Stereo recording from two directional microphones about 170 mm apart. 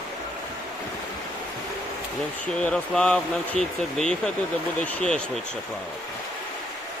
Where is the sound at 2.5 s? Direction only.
5° left (ahead or behind).